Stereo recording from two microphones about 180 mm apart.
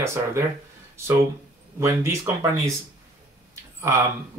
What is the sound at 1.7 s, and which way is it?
Speech, 15° right (ahead or behind).